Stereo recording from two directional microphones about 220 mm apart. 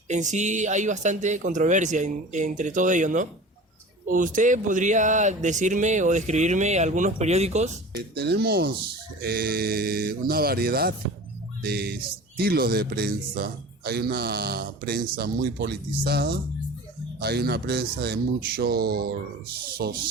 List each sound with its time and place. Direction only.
0.1 s speech: 35° right (ahead or behind)
7.9 s a man's voice: 45° right (ahead or behind)